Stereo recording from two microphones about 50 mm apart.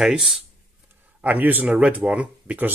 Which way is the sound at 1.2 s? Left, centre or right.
Right.